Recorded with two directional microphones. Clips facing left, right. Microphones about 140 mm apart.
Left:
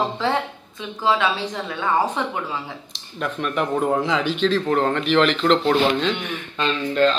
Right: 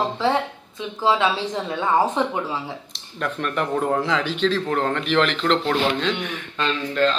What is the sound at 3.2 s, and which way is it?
A man's voice, 10° left (ahead or behind).